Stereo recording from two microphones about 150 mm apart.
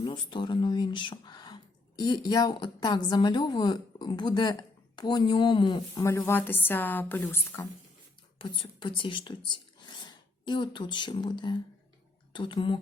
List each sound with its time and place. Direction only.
0.0 s a woman's voice: 30° left (ahead or behind)
6.0 s speech: 15° left (ahead or behind)
8.4 s speech: 35° left (ahead or behind)